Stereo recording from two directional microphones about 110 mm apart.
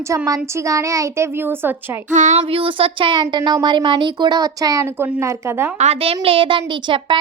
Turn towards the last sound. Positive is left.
turn(degrees=-50)  # may be behind; listen again after turning